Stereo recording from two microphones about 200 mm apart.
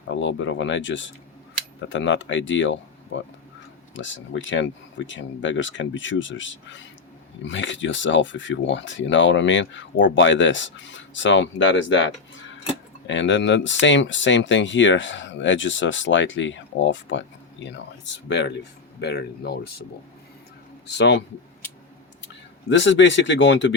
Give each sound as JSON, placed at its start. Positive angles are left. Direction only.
{"t": 0.1, "sound": "speech", "side_deg": 65}
{"t": 20.8, "sound": "speech", "side_deg": 60}
{"t": 22.7, "sound": "speech", "side_deg": 65}